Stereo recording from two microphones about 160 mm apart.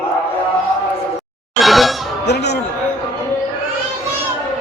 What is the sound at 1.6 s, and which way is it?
Music, centre (ahead or behind).